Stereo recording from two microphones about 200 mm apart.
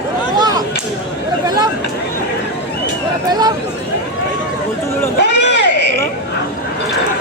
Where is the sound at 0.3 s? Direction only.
20° right (ahead or behind).